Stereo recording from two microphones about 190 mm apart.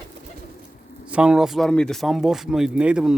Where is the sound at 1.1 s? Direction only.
5° right (ahead or behind).